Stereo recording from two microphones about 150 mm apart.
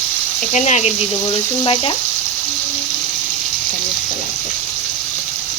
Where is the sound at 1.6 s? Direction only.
40° left (ahead or behind).